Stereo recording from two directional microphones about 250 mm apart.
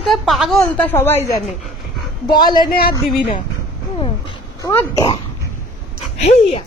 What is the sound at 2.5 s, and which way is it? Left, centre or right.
Speech, left.